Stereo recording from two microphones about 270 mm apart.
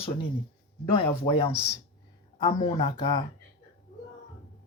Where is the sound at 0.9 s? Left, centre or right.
Centre.